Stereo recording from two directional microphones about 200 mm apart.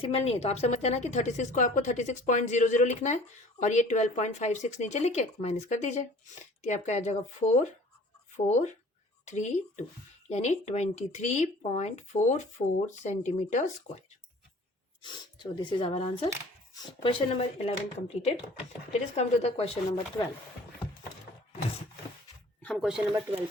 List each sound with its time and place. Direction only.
0.0 s speech: 30° left (ahead or behind)
15.0 s speech: 20° left (ahead or behind)
18.9 s speech: 35° left (ahead or behind)
22.6 s speech: centre (ahead or behind)